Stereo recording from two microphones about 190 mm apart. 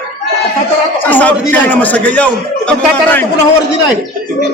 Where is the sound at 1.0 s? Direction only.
10° left (ahead or behind).